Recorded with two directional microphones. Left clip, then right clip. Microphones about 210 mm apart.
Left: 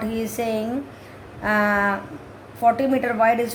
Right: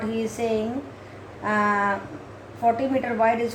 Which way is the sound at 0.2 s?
55° left (ahead or behind).